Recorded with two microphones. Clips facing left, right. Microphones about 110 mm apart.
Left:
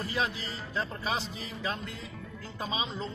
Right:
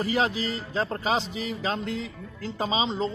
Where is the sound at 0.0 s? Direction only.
90° right.